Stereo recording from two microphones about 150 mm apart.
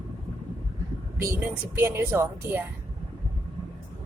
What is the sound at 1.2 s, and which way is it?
Speech, 15° right (ahead or behind).